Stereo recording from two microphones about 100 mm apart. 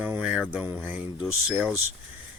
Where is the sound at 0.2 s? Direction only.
10° right (ahead or behind).